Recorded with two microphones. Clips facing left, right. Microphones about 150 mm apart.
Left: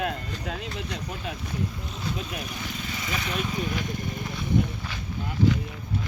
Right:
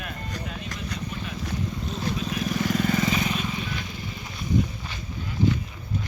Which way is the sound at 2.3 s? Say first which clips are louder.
Right 7 dB; 90° right.